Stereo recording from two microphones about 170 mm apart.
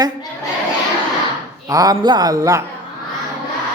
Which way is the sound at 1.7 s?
20° right (ahead or behind).